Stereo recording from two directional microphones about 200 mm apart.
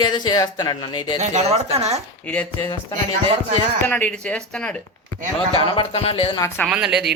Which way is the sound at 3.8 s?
5° left (ahead or behind).